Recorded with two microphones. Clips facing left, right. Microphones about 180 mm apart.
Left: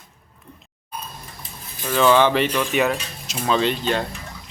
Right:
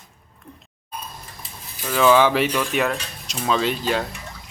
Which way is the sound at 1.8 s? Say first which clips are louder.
Even; 5° right (ahead or behind).